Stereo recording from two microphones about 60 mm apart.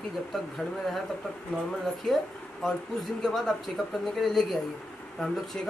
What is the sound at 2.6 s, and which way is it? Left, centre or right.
Speech, centre.